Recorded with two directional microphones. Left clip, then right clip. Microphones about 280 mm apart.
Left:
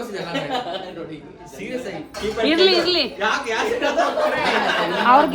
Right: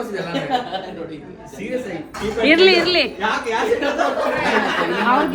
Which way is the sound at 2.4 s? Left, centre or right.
Centre.